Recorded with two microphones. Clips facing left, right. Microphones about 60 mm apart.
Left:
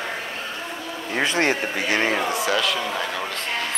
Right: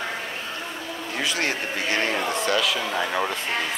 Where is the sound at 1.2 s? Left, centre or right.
Left.